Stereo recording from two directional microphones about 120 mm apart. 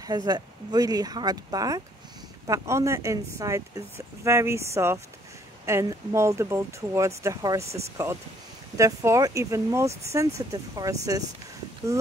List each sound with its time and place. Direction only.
0.0 s a woman's voice: 30° right (ahead or behind)